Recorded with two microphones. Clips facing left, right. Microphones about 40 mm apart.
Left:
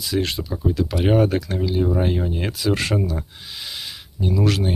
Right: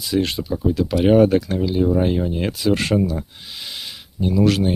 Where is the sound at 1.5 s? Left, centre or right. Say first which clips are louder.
Right 3 dB; centre.